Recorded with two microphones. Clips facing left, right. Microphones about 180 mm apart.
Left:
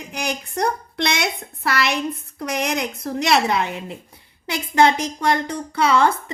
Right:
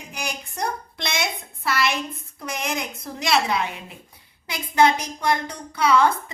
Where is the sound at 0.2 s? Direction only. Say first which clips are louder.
Left 6 dB; 60° left (ahead or behind).